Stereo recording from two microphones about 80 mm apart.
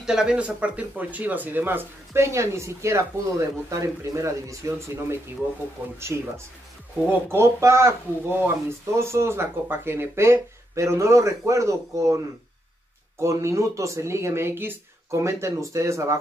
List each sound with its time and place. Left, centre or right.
0.0 s speech: centre; by 12.2 s right
13.2 s speech: right